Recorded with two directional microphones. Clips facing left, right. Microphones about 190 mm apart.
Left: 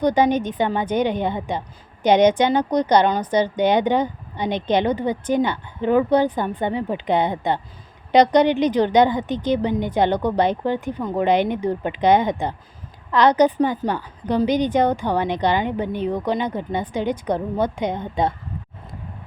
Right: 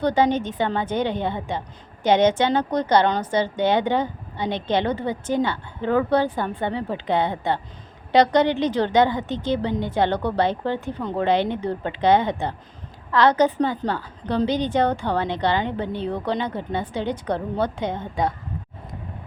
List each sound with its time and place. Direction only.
0.0 s a woman's voice: 15° left (ahead or behind)